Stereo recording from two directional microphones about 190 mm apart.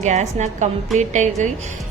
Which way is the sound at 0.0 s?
35° right (ahead or behind).